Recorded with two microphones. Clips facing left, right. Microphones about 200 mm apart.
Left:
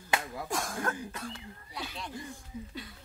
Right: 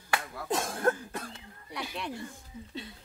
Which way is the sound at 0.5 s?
25° right (ahead or behind).